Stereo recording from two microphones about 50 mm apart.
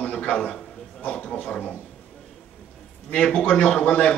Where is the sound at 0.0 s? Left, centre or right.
Centre.